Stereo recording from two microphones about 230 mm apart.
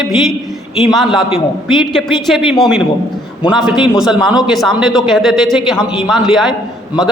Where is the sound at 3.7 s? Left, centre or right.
Left.